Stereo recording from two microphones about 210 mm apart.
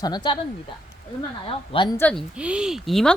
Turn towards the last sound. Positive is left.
turn(degrees=0)  # may be behind; listen again after turning